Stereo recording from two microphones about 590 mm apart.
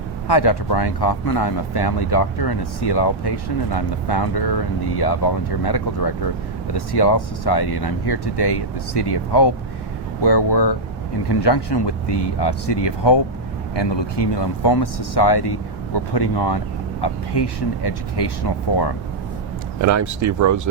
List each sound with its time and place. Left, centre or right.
0.3 s speech: left
19.8 s speech: right